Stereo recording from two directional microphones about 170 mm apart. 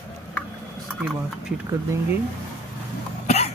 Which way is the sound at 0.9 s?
5° right (ahead or behind).